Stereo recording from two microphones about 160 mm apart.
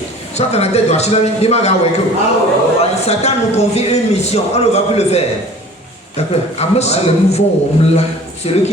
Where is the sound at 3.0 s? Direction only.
40° left (ahead or behind).